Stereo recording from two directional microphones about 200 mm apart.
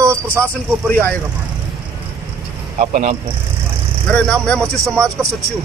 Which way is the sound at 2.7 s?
40° right (ahead or behind).